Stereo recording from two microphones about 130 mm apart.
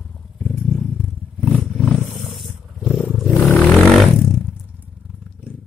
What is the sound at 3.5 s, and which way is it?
Vehicle, 10° left (ahead or behind).